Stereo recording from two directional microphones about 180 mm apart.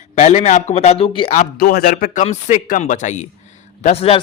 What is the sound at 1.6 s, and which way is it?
A man's voice, 60° left (ahead or behind).